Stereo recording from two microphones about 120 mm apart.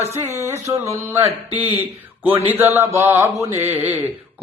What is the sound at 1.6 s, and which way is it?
Speech, 55° right (ahead or behind).